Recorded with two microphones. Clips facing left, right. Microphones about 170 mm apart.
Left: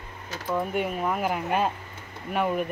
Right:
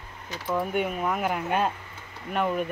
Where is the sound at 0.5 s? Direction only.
Centre (ahead or behind).